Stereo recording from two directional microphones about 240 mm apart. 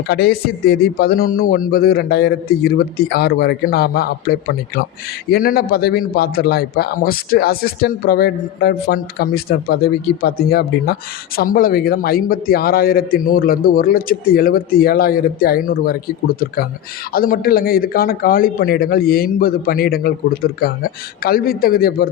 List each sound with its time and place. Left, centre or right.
0.1 s speech: left